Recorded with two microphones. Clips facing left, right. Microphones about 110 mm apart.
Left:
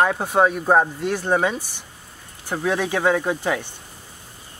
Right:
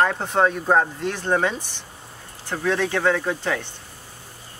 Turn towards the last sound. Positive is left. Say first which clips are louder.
# left 2 dB
turn(degrees=15)  # may be behind; listen again after turning